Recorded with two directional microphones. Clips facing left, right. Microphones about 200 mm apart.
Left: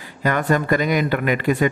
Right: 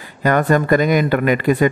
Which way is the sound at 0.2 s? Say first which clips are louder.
Right 4 dB; 45° right (ahead or behind).